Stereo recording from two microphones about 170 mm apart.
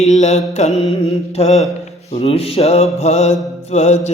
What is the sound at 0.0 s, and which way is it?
Mantra, 40° left (ahead or behind).